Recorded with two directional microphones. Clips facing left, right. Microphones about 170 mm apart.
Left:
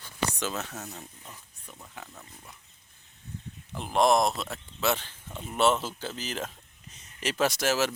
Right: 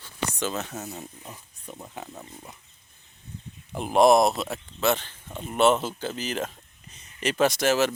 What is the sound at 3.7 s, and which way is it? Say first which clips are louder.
Speech: right 5 dB; 10° right (ahead or behind).